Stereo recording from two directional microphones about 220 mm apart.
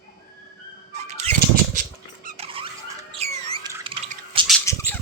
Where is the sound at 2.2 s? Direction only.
25° right (ahead or behind).